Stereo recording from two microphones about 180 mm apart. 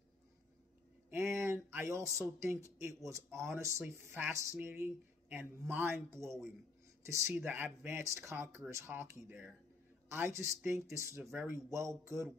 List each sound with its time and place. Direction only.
1.1 s speech: 15° right (ahead or behind)